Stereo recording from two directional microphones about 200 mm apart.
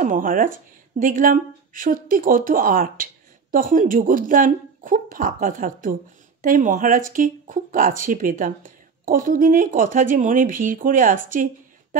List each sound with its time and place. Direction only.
0.0 s speech: 40° right (ahead or behind)